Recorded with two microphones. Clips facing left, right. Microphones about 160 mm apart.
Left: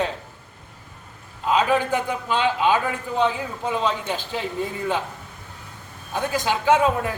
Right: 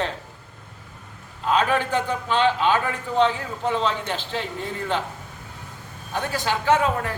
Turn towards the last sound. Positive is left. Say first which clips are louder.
# left 2 dB
turn(degrees=15)  # may be behind; listen again after turning